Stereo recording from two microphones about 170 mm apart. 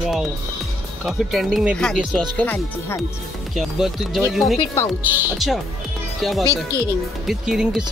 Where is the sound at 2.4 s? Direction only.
10° left (ahead or behind).